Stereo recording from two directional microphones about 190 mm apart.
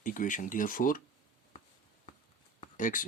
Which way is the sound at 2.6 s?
45° left (ahead or behind).